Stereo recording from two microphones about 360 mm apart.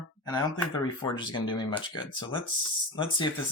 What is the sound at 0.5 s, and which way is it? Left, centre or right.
Speech, centre.